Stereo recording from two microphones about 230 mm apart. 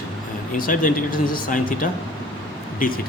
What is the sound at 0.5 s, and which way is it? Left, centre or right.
Speech, left.